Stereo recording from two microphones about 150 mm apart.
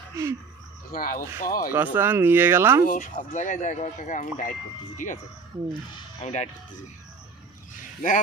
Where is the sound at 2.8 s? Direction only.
60° left (ahead or behind).